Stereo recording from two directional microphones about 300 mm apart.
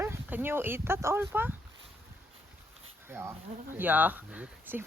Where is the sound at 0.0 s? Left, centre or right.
Centre.